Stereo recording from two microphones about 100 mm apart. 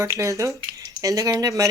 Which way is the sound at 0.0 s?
30° right (ahead or behind).